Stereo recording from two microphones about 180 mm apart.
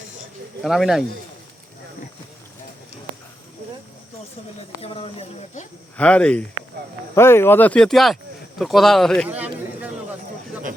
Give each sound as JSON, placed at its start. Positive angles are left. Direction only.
{"t": 0.6, "sound": "speech", "side_deg": 0}
{"t": 4.8, "sound": "speech", "side_deg": 30}
{"t": 6.0, "sound": "speech", "side_deg": 5}